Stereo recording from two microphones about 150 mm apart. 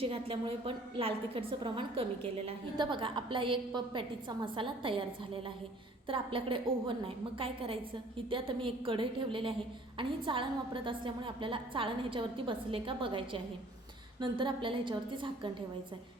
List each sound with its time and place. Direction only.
0.0 s a woman's voice: 35° right (ahead or behind)